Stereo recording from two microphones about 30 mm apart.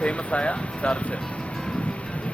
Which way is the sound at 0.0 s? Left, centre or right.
Left.